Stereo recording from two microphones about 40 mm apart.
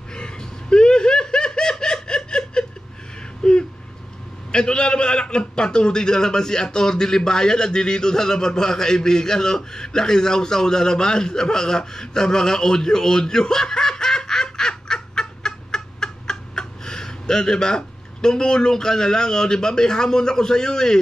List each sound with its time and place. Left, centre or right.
0.1 s snicker: left
3.4 s a sound: centre
4.5 s a man's voice: left